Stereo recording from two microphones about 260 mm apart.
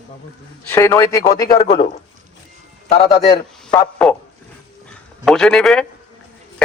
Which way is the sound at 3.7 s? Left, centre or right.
Centre.